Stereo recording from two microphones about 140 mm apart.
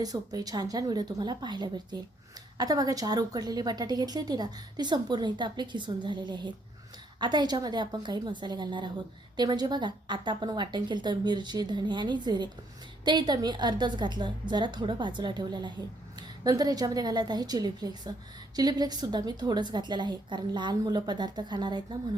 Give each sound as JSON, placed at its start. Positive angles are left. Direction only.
{"t": 0.0, "sound": "a woman's voice", "side_deg": -25}